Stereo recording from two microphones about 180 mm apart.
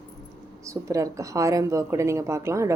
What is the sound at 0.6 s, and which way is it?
Speech, 15° right (ahead or behind).